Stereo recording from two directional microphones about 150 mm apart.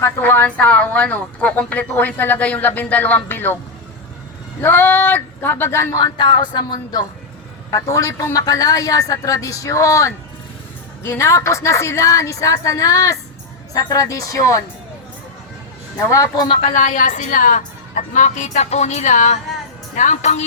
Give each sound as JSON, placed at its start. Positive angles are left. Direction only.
{"t": 0.0, "sound": "speech", "side_deg": 15}
{"t": 4.6, "sound": "speech", "side_deg": 15}
{"t": 6.1, "sound": "a woman's voice", "side_deg": 30}
{"t": 16.0, "sound": "a woman's voice", "side_deg": 20}
{"t": 16.7, "sound": "a woman's voice", "side_deg": 60}